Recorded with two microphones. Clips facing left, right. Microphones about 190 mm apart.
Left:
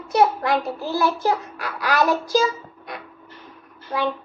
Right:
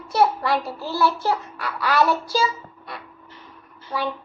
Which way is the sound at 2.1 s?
45° left (ahead or behind).